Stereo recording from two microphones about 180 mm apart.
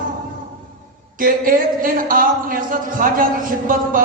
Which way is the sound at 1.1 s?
50° right (ahead or behind).